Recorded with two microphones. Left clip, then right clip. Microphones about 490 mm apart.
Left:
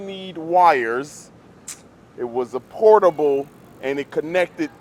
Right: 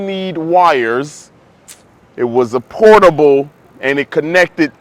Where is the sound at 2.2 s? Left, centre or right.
Right.